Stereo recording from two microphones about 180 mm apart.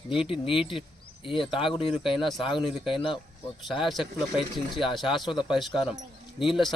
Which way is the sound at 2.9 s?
30° left (ahead or behind).